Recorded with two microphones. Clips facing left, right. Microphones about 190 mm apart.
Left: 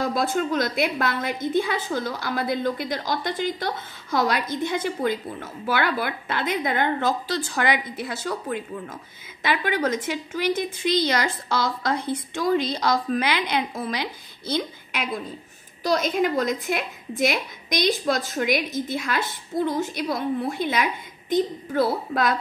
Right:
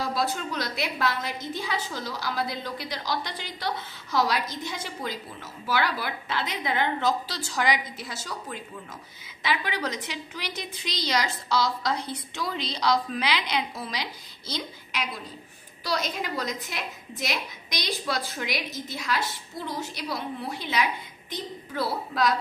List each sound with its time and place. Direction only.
0.0 s a woman's voice: 50° left (ahead or behind)